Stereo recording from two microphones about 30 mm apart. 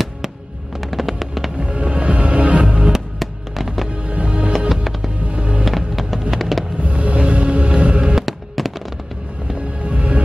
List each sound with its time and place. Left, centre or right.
0.7 s music: centre
1.7 s music: right
2.6 s music: right
3.2 s music: centre
4.2 s music: right
4.5 s music: centre
5.3 s music: right
5.7 s music: centre
6.3 s fireworks: centre
6.8 s music: right
8.3 s fireworks: centre
9.9 s music: right